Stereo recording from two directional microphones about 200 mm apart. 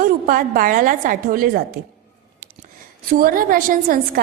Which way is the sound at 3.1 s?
45° right (ahead or behind).